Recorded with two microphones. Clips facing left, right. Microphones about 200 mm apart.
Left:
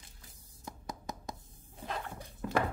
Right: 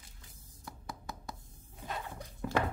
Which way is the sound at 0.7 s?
20° left (ahead or behind).